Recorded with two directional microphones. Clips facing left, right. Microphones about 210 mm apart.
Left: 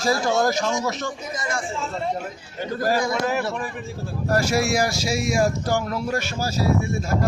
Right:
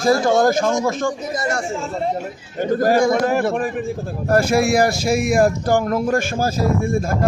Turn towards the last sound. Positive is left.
turn(degrees=-50)  # may be behind; listen again after turning